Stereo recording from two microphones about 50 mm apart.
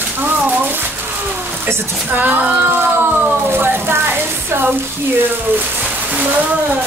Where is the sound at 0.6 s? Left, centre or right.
Right.